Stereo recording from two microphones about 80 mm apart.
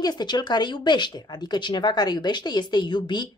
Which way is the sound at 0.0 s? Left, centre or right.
Left.